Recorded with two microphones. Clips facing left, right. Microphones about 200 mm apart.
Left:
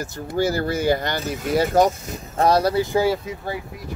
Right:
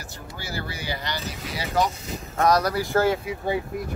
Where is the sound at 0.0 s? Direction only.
45° left (ahead or behind).